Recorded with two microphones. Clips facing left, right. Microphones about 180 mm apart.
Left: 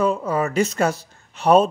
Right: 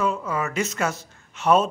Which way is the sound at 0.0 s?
35° left (ahead or behind).